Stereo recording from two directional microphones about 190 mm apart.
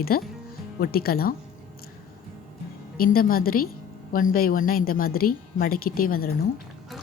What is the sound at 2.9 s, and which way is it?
A woman's voice, 50° left (ahead or behind).